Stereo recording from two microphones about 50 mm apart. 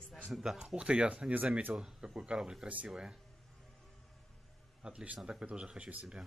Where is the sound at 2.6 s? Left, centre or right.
Right.